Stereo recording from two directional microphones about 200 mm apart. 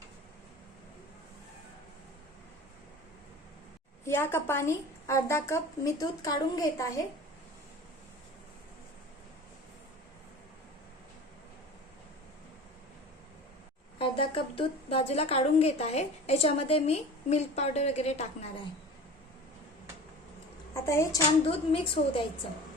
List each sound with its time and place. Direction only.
4.0 s a woman's voice: 10° left (ahead or behind)
14.0 s a woman's voice: 25° left (ahead or behind)
20.7 s a woman's voice: 15° left (ahead or behind)
21.4 s a woman's voice: 30° left (ahead or behind)